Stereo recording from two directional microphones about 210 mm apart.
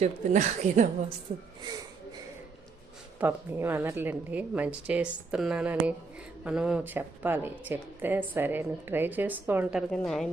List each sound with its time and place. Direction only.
0.0 s speech: 35° right (ahead or behind)
3.2 s speech: 10° right (ahead or behind)
9.9 s a woman's voice: centre (ahead or behind)